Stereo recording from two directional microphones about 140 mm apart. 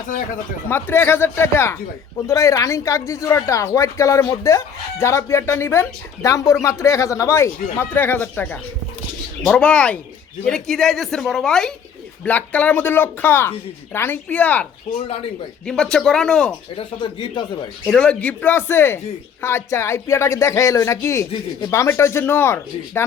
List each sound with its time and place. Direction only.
0.7 s speech: 15° left (ahead or behind)
14.9 s speech: 45° left (ahead or behind)
15.6 s speech: 5° left (ahead or behind)
16.7 s speech: 35° left (ahead or behind)
17.8 s speech: 5° left (ahead or behind)